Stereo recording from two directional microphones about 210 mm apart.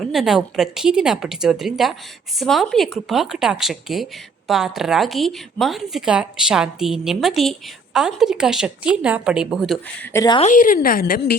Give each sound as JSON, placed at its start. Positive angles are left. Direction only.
{"t": 0.0, "sound": "speech", "side_deg": 0}
{"t": 10.1, "sound": "speech", "side_deg": 15}
{"t": 10.4, "sound": "a woman's voice", "side_deg": 40}